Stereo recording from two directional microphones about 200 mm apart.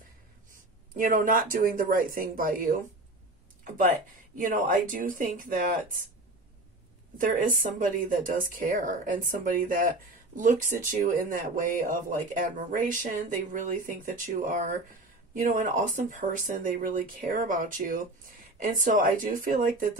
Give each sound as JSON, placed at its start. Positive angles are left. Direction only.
{"t": 0.9, "sound": "a woman's voice", "side_deg": -45}
{"t": 4.4, "sound": "speech", "side_deg": -40}
{"t": 7.2, "sound": "a woman's voice", "side_deg": -40}